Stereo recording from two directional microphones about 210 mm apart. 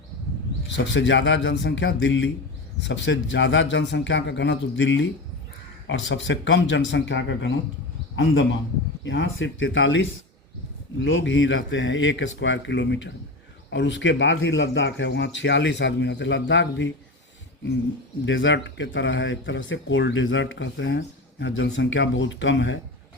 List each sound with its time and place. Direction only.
0.7 s a man's voice: 60° left (ahead or behind)
11.0 s speech: 60° left (ahead or behind)
18.3 s speech: 65° left (ahead or behind)